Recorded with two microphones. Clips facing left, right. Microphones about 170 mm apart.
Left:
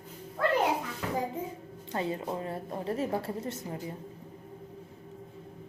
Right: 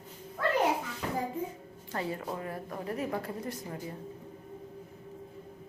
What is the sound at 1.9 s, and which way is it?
A woman's voice, 20° left (ahead or behind).